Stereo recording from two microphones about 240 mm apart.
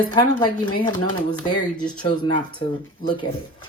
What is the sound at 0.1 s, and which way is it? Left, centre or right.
Speech, centre.